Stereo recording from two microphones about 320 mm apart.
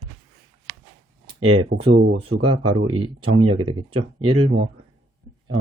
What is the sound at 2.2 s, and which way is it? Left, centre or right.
Speech, centre.